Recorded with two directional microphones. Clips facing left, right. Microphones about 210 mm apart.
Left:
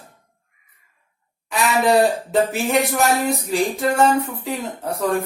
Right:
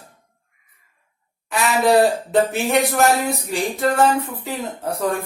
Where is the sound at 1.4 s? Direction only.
Centre (ahead or behind).